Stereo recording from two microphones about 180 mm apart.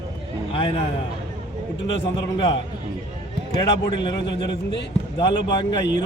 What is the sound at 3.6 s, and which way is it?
A man's voice, 25° left (ahead or behind).